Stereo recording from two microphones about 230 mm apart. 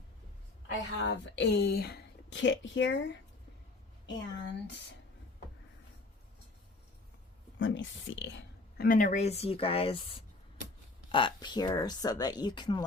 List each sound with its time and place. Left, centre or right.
0.9 s speech: left
4.0 s speech: left
7.6 s speech: left
8.8 s speech: left
11.1 s speech: left